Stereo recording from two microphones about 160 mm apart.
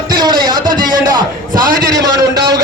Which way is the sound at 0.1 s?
25° right (ahead or behind).